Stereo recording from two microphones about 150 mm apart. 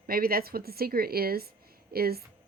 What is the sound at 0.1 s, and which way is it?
Speech, 90° right.